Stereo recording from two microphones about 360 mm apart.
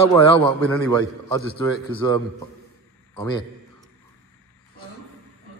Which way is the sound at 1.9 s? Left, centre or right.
Centre.